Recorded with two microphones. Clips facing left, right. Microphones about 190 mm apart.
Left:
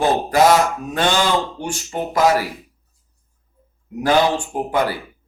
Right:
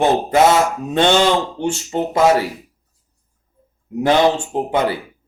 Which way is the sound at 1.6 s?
25° right (ahead or behind).